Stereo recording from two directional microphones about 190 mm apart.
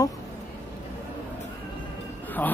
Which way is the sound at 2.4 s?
10° left (ahead or behind).